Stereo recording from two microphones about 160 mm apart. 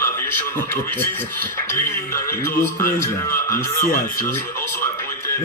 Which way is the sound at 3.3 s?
15° left (ahead or behind).